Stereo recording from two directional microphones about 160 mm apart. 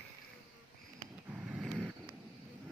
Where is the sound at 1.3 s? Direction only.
5° right (ahead or behind).